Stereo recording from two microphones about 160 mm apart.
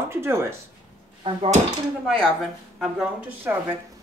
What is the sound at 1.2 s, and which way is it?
Dishes, 35° right (ahead or behind).